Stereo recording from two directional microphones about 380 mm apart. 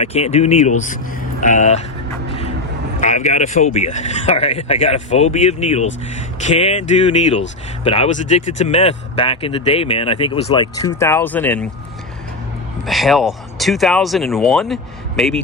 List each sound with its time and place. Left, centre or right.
0.0 s speech: centre
3.0 s speech: centre
12.8 s speech: centre